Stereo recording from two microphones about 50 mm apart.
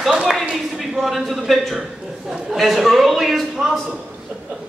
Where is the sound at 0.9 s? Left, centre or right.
Centre.